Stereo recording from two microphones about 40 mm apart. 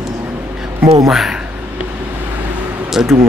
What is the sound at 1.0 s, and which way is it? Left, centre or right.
Speech, centre.